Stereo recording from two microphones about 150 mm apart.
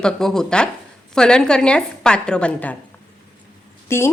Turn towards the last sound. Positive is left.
turn(degrees=15)  # may be behind; listen again after turning